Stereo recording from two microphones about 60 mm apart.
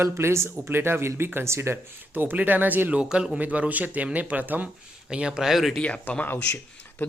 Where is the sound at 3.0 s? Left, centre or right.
Centre.